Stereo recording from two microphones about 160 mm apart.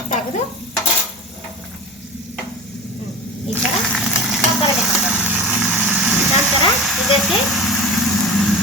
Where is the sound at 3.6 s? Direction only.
Centre (ahead or behind).